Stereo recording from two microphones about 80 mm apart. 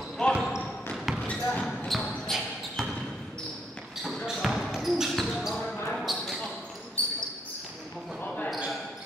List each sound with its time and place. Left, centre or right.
0.3 s a sound: centre
0.9 s basketball bounce: centre
1.2 s basketball bounce: centre
1.9 s basketball bounce: centre
4.0 s basketball bounce: centre
7.0 s basketball bounce: centre